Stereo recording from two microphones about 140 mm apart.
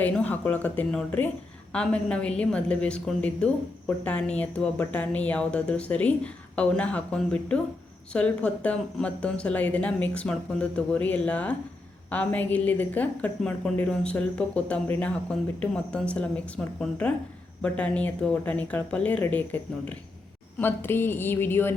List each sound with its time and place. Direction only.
0.0 s speech: 10° left (ahead or behind)